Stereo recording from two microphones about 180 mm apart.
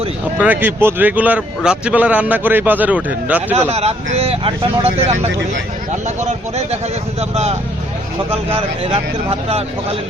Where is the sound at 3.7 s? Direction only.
35° right (ahead or behind).